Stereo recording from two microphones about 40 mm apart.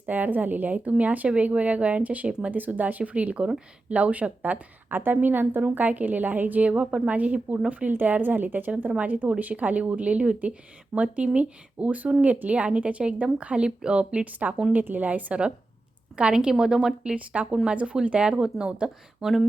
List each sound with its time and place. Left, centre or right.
0.0 s a woman's voice: right
2.5 s a woman's voice: right
4.9 s a woman's voice: right
5.6 s a woman's voice: right
8.9 s a woman's voice: right
14.7 s a woman's voice: right
16.3 s a woman's voice: centre
17.2 s a woman's voice: right
18.3 s speech: centre
19.2 s speech: centre